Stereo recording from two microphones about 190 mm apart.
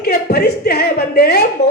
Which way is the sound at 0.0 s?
55° left (ahead or behind).